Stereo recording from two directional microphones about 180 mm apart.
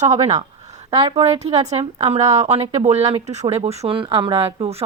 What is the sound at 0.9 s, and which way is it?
Speech, 20° right (ahead or behind).